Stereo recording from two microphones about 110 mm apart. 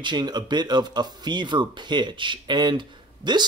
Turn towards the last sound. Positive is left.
turn(degrees=-40)  # may be behind; listen again after turning